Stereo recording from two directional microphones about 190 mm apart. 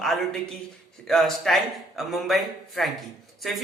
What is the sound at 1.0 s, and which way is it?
A man's voice, centre (ahead or behind).